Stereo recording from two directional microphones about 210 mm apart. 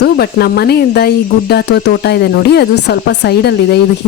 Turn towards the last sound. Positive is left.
turn(degrees=50)  # may be behind; listen again after turning